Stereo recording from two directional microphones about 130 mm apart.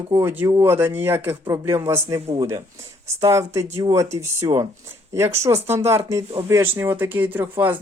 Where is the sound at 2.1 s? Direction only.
50° right (ahead or behind).